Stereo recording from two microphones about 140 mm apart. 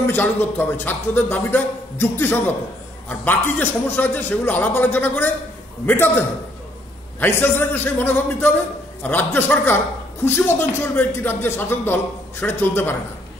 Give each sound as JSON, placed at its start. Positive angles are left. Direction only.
{"t": 0.0, "sound": "a man's voice", "side_deg": 15}